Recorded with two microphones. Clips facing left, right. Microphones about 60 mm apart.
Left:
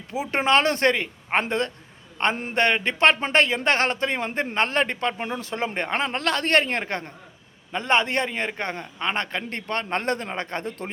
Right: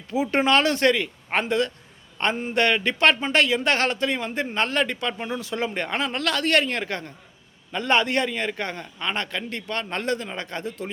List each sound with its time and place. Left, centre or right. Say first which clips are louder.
0.1 s a man's voice: right 1 dB; left